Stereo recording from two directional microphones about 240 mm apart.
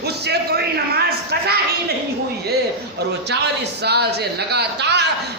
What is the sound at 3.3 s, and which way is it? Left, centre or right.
A man's voice, right.